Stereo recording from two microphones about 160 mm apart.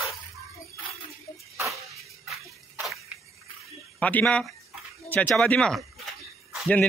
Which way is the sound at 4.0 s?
10° left (ahead or behind).